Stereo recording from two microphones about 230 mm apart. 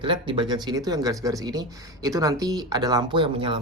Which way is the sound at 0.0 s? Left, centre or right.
Right.